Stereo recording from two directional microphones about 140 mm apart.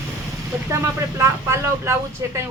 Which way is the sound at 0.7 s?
20° right (ahead or behind).